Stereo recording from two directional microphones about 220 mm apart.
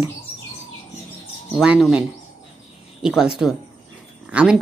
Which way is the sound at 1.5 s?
Centre (ahead or behind).